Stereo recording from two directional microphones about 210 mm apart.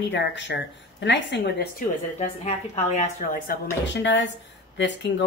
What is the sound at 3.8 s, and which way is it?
Speech, 60° left (ahead or behind).